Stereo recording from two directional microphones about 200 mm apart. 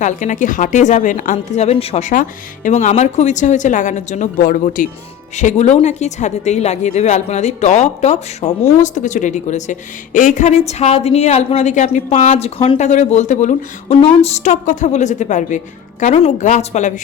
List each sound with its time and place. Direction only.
0.0 s a woman's voice: 40° left (ahead or behind)